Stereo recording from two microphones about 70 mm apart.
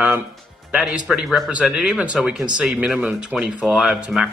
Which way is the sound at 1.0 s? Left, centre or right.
Centre.